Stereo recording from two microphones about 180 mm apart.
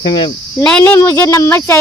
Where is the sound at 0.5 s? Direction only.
10° left (ahead or behind).